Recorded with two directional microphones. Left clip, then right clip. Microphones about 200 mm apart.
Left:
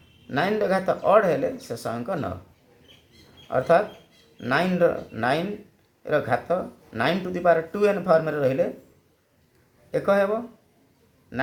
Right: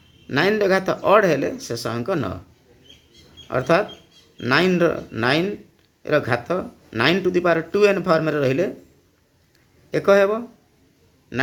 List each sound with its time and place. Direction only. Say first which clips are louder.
0.3 s speech: right 5 dB; 45° right (ahead or behind)
3.5 s speech: right 1 dB; 50° right (ahead or behind)
9.9 s a man's voice: right 5 dB; 50° right (ahead or behind)